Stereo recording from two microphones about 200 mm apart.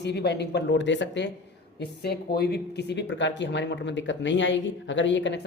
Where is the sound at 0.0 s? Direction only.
55° left (ahead or behind).